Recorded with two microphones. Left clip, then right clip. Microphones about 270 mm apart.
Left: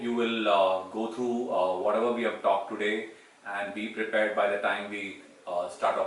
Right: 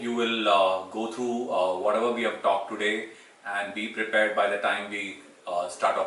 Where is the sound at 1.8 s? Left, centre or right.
Centre.